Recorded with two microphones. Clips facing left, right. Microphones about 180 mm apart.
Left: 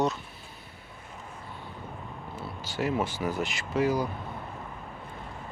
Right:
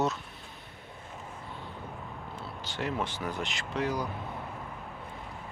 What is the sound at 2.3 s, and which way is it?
Speech, 5° left (ahead or behind).